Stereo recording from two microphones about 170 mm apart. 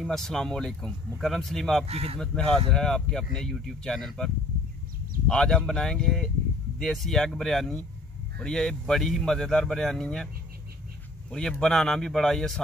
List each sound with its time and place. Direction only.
0.0 s speech: centre (ahead or behind)
1.9 s speech: 35° right (ahead or behind)
2.7 s speech: centre (ahead or behind)
5.3 s a man's voice: 5° left (ahead or behind)